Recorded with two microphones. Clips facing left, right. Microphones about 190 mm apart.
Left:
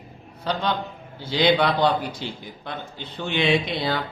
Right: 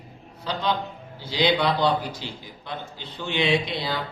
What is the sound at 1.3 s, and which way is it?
A man's voice, 55° left (ahead or behind).